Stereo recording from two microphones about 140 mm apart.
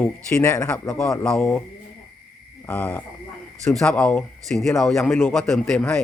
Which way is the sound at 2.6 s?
10° left (ahead or behind).